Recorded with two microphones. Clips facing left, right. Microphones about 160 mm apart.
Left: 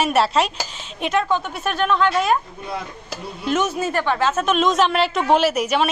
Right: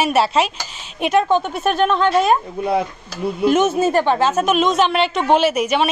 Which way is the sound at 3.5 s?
25° right (ahead or behind).